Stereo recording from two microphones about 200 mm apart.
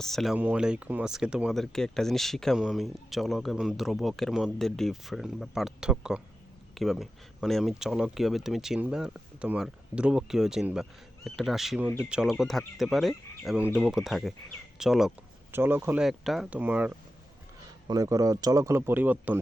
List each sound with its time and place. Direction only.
0.0 s speech: centre (ahead or behind)